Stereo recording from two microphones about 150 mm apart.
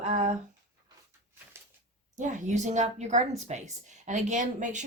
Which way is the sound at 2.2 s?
55° right (ahead or behind).